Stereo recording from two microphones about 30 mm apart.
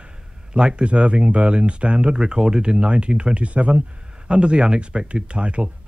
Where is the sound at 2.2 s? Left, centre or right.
Right.